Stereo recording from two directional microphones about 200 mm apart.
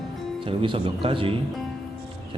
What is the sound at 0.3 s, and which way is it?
Speech, 25° right (ahead or behind).